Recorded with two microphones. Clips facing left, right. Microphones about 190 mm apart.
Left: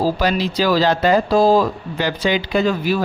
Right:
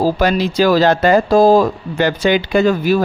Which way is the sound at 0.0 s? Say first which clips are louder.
Right 3 dB; 50° right (ahead or behind).